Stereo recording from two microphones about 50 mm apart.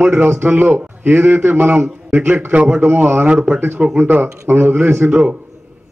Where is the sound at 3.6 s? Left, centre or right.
Right.